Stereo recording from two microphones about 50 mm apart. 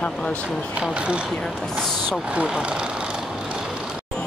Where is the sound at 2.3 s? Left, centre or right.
Right.